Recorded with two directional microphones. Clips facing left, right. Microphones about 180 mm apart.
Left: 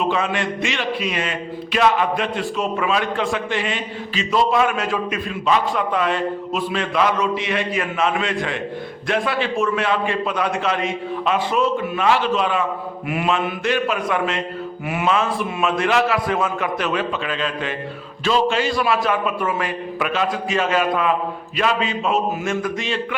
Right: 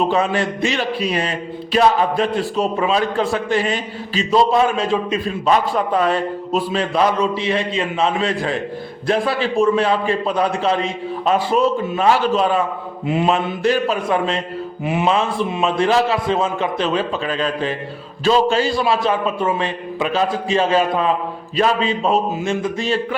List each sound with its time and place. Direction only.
0.0 s a man's voice: 35° right (ahead or behind)